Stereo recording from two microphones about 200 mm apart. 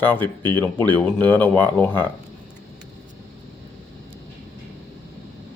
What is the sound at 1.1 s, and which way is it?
Speech, 10° left (ahead or behind).